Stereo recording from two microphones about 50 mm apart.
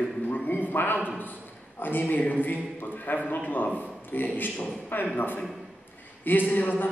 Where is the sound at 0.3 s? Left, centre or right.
Left.